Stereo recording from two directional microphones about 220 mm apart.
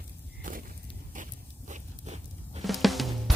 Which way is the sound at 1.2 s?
35° right (ahead or behind).